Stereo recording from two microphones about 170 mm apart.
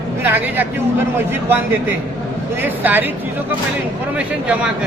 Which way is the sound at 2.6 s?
10° right (ahead or behind).